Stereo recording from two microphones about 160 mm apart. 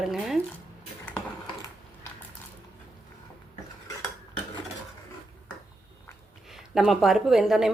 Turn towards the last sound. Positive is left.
turn(degrees=0)  # may be behind; listen again after turning